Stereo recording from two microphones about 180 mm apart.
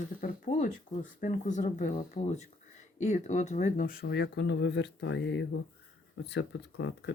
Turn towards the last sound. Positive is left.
turn(degrees=80)